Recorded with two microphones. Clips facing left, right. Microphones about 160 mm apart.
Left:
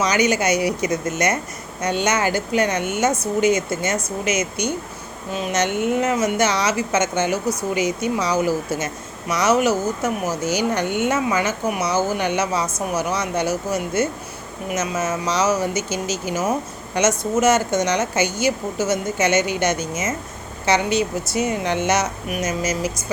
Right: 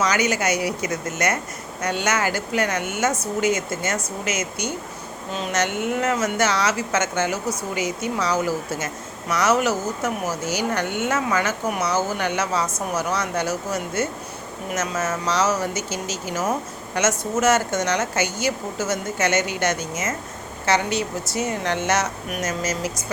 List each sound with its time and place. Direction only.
0.0 s a woman's voice: 20° left (ahead or behind)
14.8 s a woman's voice: 15° left (ahead or behind)